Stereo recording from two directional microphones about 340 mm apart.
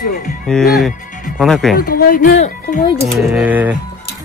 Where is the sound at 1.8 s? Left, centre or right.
Left.